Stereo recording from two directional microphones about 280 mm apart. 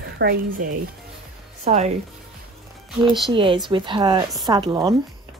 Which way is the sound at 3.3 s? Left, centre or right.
Centre.